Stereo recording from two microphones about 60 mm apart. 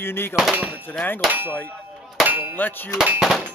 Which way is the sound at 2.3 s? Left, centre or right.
Right.